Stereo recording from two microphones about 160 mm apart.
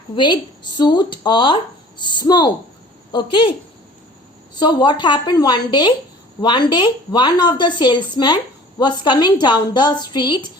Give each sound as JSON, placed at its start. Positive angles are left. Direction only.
{"t": 0.2, "sound": "a woman's voice", "side_deg": 30}
{"t": 4.5, "sound": "speech", "side_deg": 30}